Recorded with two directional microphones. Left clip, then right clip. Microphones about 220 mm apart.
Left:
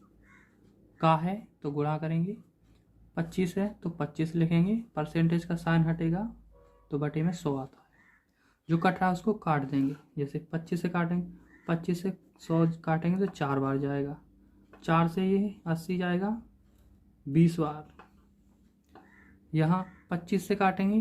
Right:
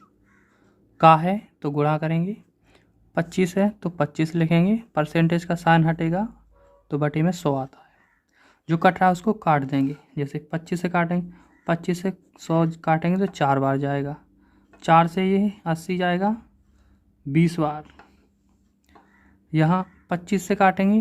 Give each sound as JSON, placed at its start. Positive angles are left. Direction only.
{"t": 0.9, "sound": "speech", "side_deg": -45}
{"t": 17.3, "sound": "speech", "side_deg": -40}
{"t": 19.5, "sound": "speech", "side_deg": -35}